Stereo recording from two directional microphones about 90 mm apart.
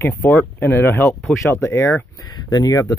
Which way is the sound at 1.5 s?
30° left (ahead or behind).